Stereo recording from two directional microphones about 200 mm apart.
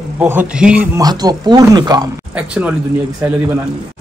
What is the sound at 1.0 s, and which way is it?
Speech, 20° right (ahead or behind).